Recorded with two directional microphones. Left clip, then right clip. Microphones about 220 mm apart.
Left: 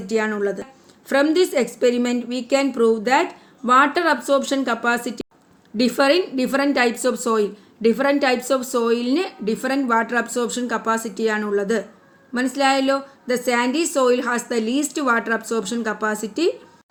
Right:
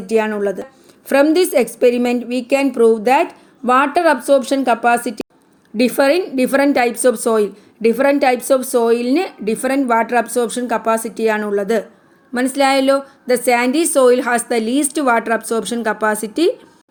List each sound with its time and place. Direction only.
0.1 s a woman's voice: 25° right (ahead or behind)